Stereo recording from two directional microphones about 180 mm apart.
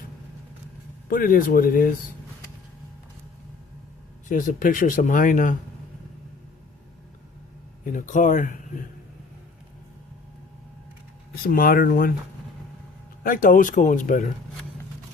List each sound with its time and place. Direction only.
1.1 s speech: 50° left (ahead or behind)
4.3 s speech: 45° left (ahead or behind)
7.9 s speech: 45° left (ahead or behind)
11.4 s speech: 50° left (ahead or behind)
13.2 s speech: 50° left (ahead or behind)